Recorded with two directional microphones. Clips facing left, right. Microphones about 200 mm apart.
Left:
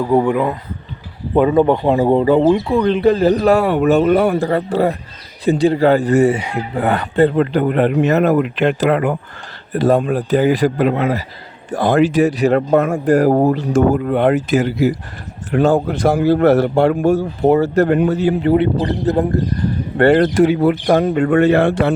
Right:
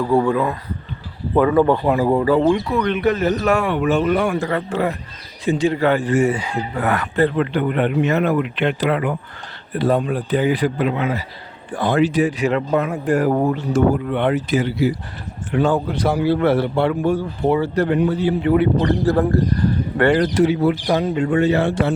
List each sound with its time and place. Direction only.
0.0 s speech: 20° left (ahead or behind); by 6.3 s 40° left (ahead or behind)
6.3 s speech: 25° left (ahead or behind); by 14.3 s 40° left (ahead or behind)
15.5 s speech: 50° left (ahead or behind)
18.4 s speech: 30° left (ahead or behind)
20.1 s speech: 50° left (ahead or behind)